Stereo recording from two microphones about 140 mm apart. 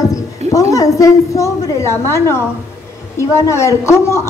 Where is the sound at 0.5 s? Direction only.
25° left (ahead or behind).